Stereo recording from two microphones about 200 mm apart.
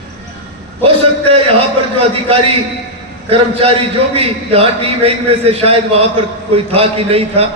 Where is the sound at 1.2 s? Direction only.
30° right (ahead or behind).